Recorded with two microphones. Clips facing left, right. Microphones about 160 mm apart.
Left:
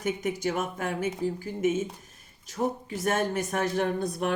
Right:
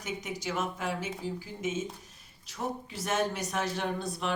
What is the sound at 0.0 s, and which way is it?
Speech, 55° left (ahead or behind).